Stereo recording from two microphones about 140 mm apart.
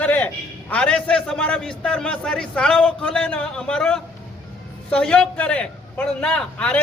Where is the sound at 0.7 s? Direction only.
5° left (ahead or behind).